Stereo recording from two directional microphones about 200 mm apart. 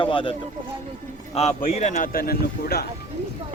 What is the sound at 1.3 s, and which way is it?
Speech, 30° left (ahead or behind).